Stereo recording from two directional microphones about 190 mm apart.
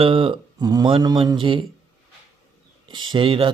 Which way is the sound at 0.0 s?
30° right (ahead or behind).